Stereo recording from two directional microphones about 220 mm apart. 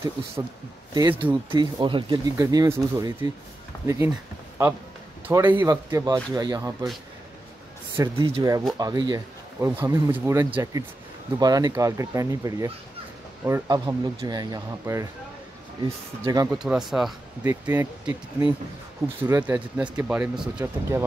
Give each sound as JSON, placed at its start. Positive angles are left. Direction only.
{"t": 0.9, "sound": "speech", "side_deg": -15}
{"t": 5.3, "sound": "speech", "side_deg": -10}
{"t": 7.9, "sound": "speech", "side_deg": -15}
{"t": 16.4, "sound": "speech", "side_deg": -5}
{"t": 19.2, "sound": "speech", "side_deg": -10}